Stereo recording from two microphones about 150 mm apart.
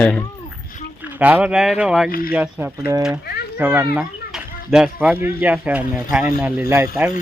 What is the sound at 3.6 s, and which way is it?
Speech, 10° right (ahead or behind).